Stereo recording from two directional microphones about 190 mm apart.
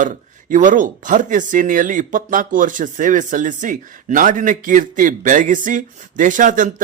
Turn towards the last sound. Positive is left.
turn(degrees=-45)  # may be behind; listen again after turning